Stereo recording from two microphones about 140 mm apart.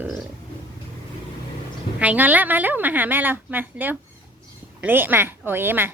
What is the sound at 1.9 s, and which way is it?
A woman's voice, 10° right (ahead or behind).